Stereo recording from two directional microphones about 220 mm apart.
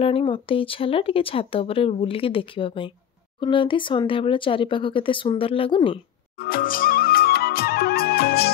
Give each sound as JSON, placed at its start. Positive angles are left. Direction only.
{"t": 0.0, "sound": "speech", "side_deg": 25}
{"t": 6.3, "sound": "music", "side_deg": 40}